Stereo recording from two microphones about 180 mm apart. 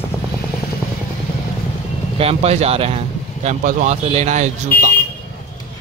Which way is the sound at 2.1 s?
35° right (ahead or behind).